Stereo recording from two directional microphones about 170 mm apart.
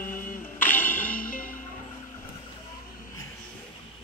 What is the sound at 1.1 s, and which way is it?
Music, 55° left (ahead or behind).